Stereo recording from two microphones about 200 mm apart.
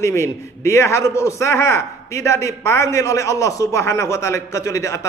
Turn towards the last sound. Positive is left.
turn(degrees=15)  # may be behind; listen again after turning